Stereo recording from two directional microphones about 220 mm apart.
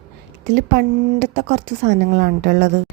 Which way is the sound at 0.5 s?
50° right (ahead or behind).